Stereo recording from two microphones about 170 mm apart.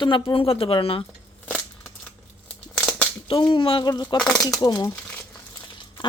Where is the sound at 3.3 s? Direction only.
30° left (ahead or behind).